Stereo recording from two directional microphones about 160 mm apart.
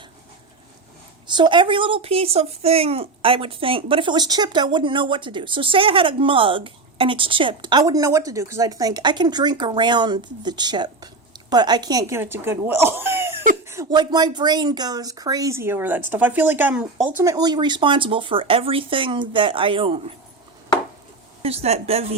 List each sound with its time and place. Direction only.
1.3 s speech: 30° right (ahead or behind); by 16.8 s 10° right (ahead or behind)
17.2 s speech: 20° right (ahead or behind)
21.4 s speech: 40° right (ahead or behind)